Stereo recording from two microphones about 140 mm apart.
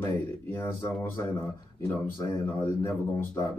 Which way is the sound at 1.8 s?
20° left (ahead or behind).